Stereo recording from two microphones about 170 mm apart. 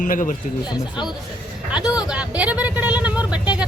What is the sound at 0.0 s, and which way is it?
Speech, 50° left (ahead or behind).